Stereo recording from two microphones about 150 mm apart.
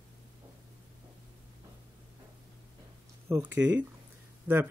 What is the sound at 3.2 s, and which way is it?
Speech, 15° right (ahead or behind).